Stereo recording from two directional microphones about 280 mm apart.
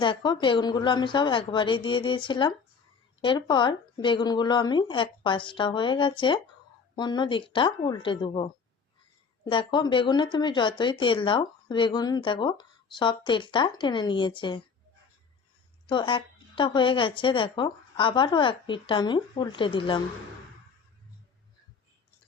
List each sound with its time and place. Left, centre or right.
0.0 s speech: centre
15.9 s speech: centre